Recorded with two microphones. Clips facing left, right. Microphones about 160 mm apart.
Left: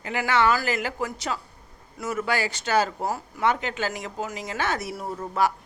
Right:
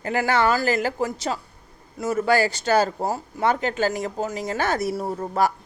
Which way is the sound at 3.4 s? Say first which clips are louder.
Right 3 dB; 40° right (ahead or behind).